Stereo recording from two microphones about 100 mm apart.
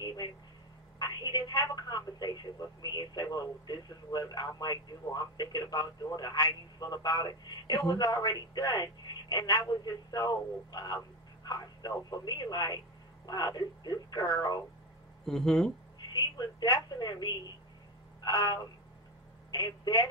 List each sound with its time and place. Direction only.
0.9 s telephone: 45° left (ahead or behind)
2.8 s a man's voice: 45° left (ahead or behind)
15.2 s speech: 5° left (ahead or behind)
16.1 s a man's voice: 45° left (ahead or behind)
18.2 s a sound: 40° left (ahead or behind)
19.5 s a man's voice: 45° left (ahead or behind)